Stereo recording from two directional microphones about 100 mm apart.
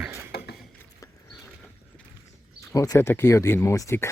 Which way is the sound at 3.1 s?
25° left (ahead or behind).